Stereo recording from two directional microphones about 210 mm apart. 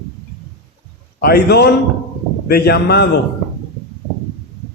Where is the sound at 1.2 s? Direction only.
50° left (ahead or behind).